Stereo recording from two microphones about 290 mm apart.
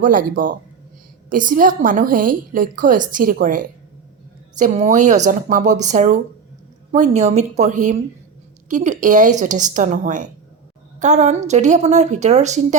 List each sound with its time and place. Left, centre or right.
0.0 s a woman's voice: right